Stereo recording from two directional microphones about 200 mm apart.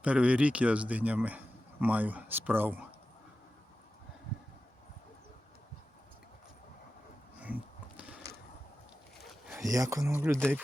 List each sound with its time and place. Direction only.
0.0 s a man's voice: 5° right (ahead or behind)
9.1 s a sound: centre (ahead or behind)
9.6 s a man's voice: 15° right (ahead or behind)